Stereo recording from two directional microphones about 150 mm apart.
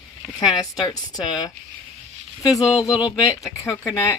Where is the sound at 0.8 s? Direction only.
30° left (ahead or behind).